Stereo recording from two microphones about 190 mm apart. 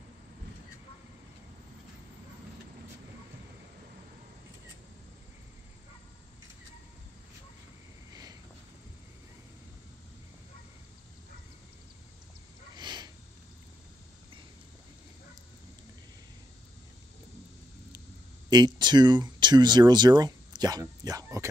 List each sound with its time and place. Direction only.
8.1 s a sound: 20° right (ahead or behind)
12.7 s sniff: 25° right (ahead or behind)
18.5 s speech: 20° right (ahead or behind)